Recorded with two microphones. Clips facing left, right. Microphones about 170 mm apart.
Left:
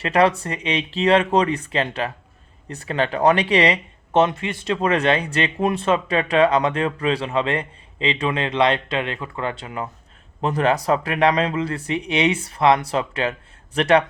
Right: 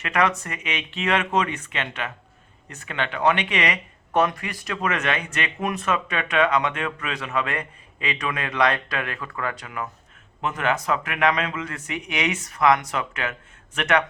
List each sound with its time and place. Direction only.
0.0 s speech: 30° left (ahead or behind)